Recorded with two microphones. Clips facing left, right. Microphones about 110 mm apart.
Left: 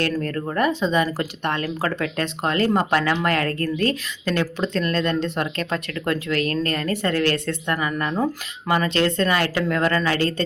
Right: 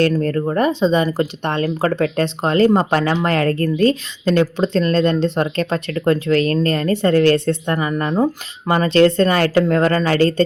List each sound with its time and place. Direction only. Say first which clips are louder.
0.0 s speech: right 7 dB; 30° right (ahead or behind)